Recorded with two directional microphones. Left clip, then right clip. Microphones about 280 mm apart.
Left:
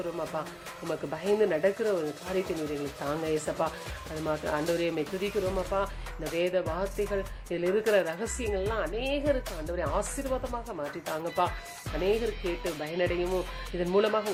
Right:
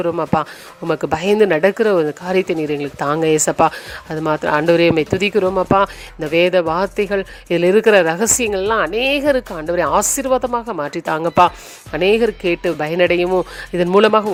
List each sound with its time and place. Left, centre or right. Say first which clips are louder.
0.0 s speech: right 16 dB; right